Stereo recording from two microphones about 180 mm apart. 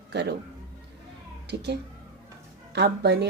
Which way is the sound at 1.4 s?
70° right (ahead or behind).